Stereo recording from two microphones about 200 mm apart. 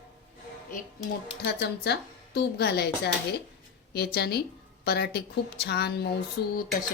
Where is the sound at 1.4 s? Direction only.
55° left (ahead or behind).